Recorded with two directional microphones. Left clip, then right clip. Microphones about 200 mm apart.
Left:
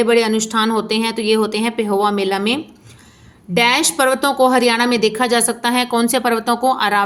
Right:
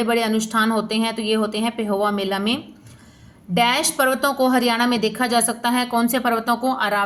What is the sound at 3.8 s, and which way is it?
A woman's voice, 35° left (ahead or behind).